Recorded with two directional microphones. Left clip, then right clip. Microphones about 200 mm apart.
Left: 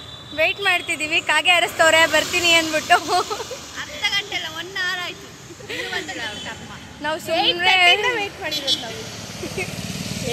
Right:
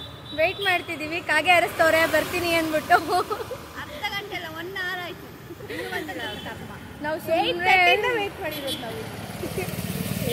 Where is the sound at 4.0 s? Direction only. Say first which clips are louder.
Left 8 dB; 25° right (ahead or behind).